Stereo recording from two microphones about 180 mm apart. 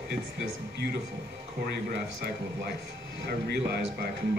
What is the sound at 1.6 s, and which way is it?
Speech, 65° right (ahead or behind).